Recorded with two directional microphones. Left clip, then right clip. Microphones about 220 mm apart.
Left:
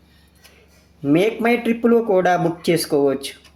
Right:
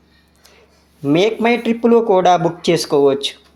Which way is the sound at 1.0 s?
20° right (ahead or behind).